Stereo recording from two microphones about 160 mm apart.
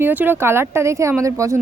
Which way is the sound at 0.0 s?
10° right (ahead or behind).